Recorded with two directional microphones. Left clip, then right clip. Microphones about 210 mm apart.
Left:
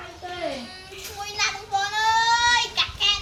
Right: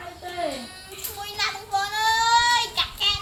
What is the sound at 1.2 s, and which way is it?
Child singing, 10° right (ahead or behind).